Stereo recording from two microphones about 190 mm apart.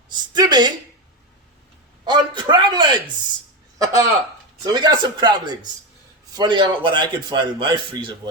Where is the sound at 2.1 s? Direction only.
20° right (ahead or behind).